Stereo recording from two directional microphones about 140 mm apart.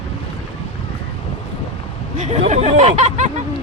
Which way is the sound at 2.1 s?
50° right (ahead or behind).